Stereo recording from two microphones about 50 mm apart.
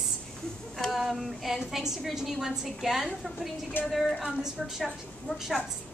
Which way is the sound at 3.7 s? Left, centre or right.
Left.